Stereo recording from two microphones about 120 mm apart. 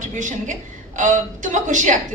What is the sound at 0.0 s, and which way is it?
A woman's voice, 90° right.